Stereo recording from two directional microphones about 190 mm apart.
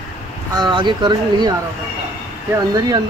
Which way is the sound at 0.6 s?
25° right (ahead or behind).